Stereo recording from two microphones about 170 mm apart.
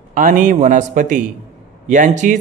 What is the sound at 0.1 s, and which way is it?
A man's voice, 50° right (ahead or behind).